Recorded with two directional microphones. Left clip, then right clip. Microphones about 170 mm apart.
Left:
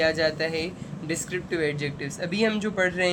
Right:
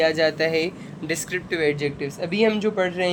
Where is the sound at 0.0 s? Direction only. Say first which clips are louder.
Right 4 dB; 30° right (ahead or behind).